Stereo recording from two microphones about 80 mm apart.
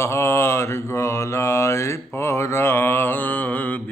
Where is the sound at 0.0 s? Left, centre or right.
Left.